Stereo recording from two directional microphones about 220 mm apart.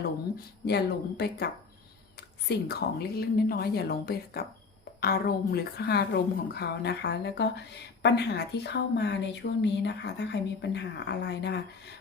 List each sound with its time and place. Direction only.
0.6 s a woman's voice: 50° left (ahead or behind)
2.5 s a woman's voice: 45° left (ahead or behind)